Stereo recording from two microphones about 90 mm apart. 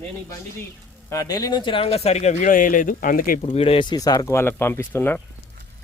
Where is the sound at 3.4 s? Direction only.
90° left.